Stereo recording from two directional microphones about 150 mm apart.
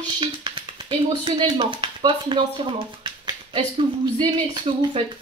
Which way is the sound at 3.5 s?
35° right (ahead or behind).